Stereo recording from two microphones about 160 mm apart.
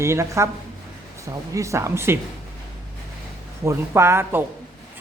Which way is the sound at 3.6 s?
15° right (ahead or behind).